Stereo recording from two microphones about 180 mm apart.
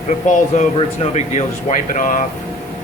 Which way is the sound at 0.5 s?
40° left (ahead or behind).